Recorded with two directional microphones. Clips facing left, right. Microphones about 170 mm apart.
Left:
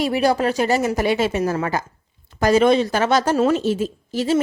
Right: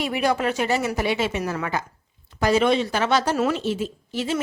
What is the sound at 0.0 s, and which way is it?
A woman's voice, 35° left (ahead or behind).